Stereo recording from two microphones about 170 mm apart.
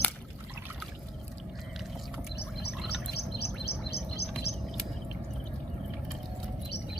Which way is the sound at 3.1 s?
75° left (ahead or behind).